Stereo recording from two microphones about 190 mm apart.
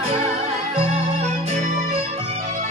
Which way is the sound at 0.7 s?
30° right (ahead or behind).